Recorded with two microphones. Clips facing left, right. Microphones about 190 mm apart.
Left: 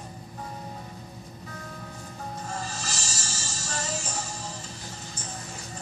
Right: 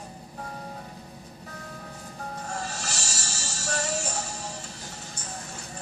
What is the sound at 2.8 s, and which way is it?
Music, 65° right (ahead or behind).